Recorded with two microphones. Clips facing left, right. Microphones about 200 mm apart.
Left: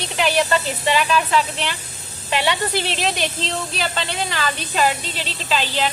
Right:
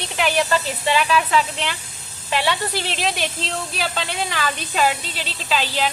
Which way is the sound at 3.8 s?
10° right (ahead or behind).